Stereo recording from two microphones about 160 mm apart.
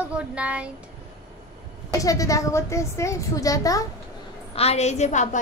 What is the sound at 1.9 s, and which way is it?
A woman's voice, 20° left (ahead or behind).